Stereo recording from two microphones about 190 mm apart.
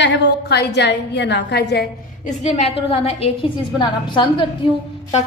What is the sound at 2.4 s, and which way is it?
A woman's voice, 35° left (ahead or behind).